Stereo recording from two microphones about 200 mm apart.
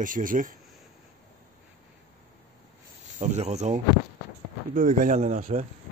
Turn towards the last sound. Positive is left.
turn(degrees=-35)  # may be behind; listen again after turning